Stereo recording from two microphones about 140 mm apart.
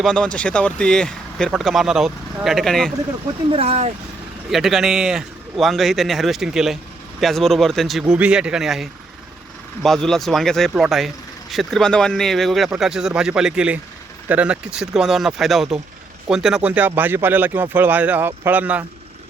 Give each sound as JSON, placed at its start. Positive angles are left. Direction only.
{"t": 0.0, "sound": "speech", "side_deg": 5}
{"t": 3.5, "sound": "speech", "side_deg": -45}
{"t": 4.5, "sound": "speech", "side_deg": 0}